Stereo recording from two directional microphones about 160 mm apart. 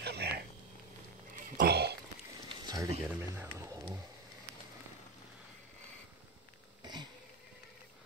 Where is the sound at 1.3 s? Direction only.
55° right (ahead or behind).